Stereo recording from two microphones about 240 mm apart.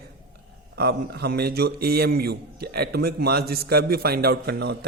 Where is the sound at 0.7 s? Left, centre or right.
Right.